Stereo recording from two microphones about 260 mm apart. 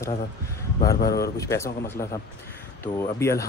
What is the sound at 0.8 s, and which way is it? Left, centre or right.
Speech, left.